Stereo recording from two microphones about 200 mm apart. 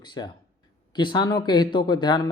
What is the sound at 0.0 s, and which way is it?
Speech, 20° left (ahead or behind).